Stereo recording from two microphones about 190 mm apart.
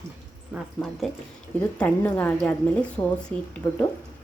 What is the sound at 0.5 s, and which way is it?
A woman's voice, centre (ahead or behind).